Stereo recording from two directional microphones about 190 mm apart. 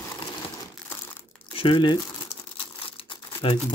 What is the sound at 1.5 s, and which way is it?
Speech, 30° left (ahead or behind).